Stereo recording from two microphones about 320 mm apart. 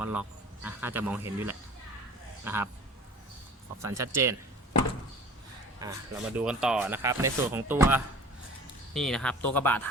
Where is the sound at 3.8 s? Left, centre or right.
Centre.